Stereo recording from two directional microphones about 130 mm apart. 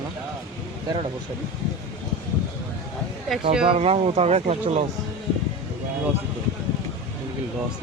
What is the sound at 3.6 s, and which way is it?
A man's voice, 45° right (ahead or behind).